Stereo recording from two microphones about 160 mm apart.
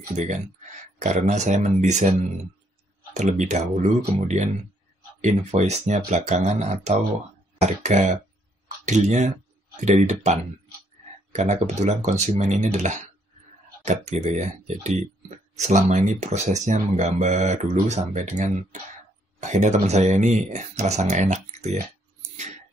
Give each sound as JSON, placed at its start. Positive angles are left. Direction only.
{"t": 0.1, "sound": "speech", "side_deg": -50}
{"t": 5.2, "sound": "speech", "side_deg": -45}